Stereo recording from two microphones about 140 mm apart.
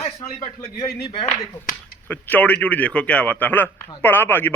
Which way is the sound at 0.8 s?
30° left (ahead or behind).